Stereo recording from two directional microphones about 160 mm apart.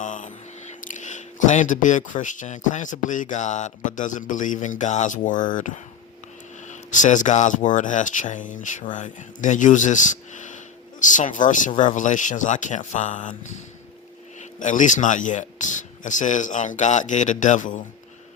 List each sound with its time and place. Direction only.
0.0 s speech: 50° left (ahead or behind)